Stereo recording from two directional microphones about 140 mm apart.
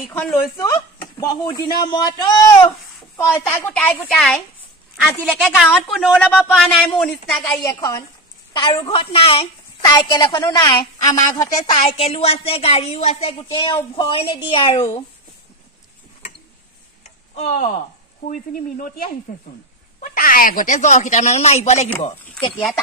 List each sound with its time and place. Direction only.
0.1 s a woman's voice: 15° left (ahead or behind)
0.6 s speech: 30° left (ahead or behind)
3.3 s a woman's voice: 15° left (ahead or behind)
7.4 s speech: 25° left (ahead or behind)
8.9 s a woman's voice: 40° left (ahead or behind)
9.8 s a woman's voice: 30° left (ahead or behind)
11.7 s a woman's voice: 45° left (ahead or behind)
17.4 s a woman's voice: 60° left (ahead or behind)